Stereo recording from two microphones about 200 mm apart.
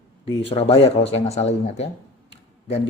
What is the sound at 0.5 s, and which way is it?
Speech, 30° left (ahead or behind).